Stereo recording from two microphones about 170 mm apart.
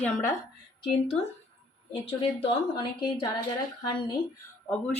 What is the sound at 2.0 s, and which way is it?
A woman's voice, 35° left (ahead or behind).